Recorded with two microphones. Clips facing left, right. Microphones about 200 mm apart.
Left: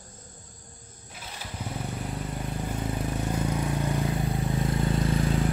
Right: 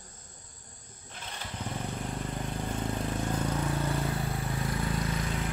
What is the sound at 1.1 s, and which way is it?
Vehicle, 5° left (ahead or behind).